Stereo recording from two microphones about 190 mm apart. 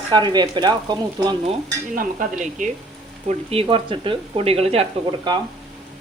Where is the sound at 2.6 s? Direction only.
40° right (ahead or behind).